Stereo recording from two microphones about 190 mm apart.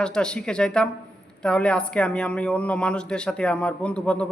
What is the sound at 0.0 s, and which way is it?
A man's voice, 5° left (ahead or behind).